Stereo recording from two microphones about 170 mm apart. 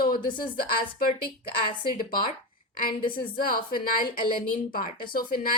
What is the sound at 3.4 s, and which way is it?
Speech, 60° left (ahead or behind).